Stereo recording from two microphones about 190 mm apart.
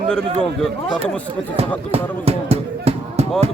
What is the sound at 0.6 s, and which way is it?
Speech, 5° left (ahead or behind).